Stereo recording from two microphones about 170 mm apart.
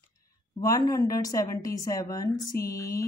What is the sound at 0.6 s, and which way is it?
Speech, 20° left (ahead or behind).